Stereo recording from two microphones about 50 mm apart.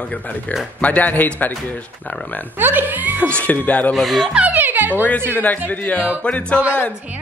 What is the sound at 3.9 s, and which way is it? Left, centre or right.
Speech, centre.